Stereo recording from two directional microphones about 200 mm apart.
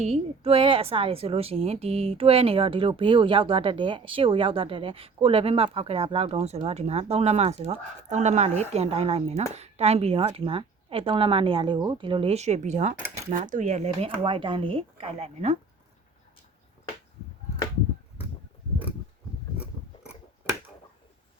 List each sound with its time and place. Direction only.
0.0 s a woman's voice: 30° right (ahead or behind)